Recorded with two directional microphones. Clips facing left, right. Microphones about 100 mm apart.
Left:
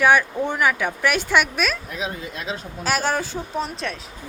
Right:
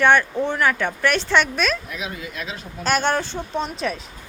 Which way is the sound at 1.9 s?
35° left (ahead or behind).